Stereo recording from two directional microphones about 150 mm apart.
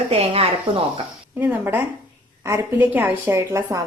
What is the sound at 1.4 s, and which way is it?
A woman's voice, 10° right (ahead or behind).